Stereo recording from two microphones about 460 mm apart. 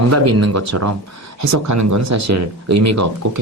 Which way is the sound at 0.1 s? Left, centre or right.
Right.